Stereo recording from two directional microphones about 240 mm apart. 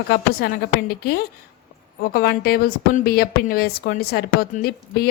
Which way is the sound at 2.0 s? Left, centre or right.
Left.